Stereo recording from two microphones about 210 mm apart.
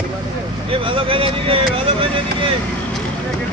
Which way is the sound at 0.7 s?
25° right (ahead or behind).